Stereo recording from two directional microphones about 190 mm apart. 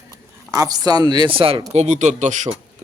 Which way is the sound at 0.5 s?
20° right (ahead or behind).